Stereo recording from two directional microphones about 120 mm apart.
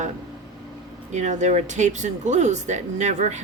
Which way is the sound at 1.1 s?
80° right.